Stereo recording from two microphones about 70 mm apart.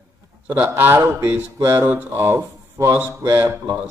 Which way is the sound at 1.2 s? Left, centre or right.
Right.